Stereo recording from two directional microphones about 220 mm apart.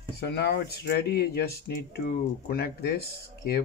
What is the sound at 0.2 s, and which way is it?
Speech, 50° left (ahead or behind).